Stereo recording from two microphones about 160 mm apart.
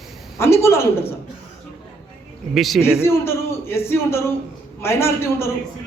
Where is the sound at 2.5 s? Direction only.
Centre (ahead or behind).